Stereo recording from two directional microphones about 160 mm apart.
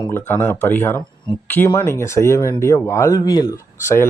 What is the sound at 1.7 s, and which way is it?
Speech, 15° left (ahead or behind).